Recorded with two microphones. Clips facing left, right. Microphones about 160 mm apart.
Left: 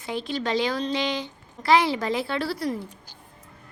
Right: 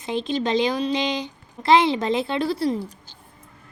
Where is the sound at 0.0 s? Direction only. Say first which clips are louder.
Right 4 dB; 20° right (ahead or behind).